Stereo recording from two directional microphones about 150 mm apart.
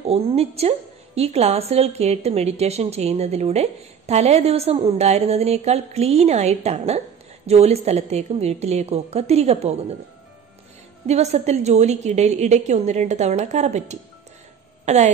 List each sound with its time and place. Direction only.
0.1 s a woman's voice: 45° right (ahead or behind)
11.1 s a woman's voice: 45° right (ahead or behind)